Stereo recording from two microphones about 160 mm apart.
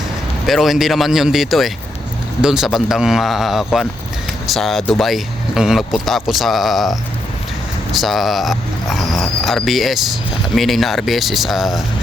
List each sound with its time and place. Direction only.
0.4 s speech: centre (ahead or behind)
7.9 s speech: centre (ahead or behind)